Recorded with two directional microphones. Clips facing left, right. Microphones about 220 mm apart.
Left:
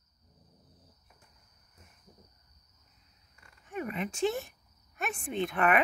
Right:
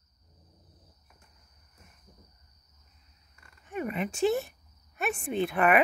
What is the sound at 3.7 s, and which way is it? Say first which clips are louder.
Speech: right 3 dB; 5° right (ahead or behind).